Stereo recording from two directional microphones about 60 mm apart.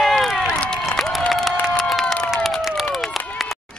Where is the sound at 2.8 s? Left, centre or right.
Centre.